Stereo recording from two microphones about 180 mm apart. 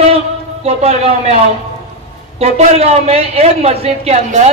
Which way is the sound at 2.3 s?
35° right (ahead or behind).